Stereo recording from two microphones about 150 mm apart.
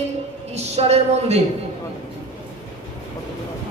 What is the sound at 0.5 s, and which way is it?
Speech, 45° right (ahead or behind).